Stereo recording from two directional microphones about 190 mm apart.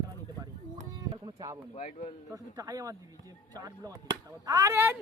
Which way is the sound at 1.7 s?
35° left (ahead or behind).